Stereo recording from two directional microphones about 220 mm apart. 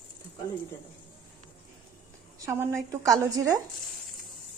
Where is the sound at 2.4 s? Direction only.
10° right (ahead or behind).